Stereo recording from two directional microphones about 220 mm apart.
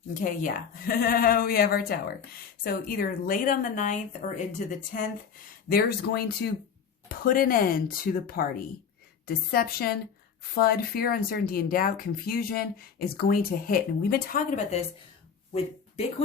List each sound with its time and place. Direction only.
0.1 s a woman's voice: 40° left (ahead or behind)